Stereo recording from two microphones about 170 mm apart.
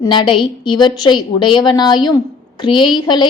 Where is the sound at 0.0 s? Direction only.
25° left (ahead or behind).